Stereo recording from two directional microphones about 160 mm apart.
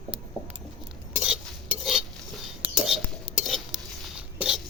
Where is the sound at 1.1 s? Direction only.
5° right (ahead or behind).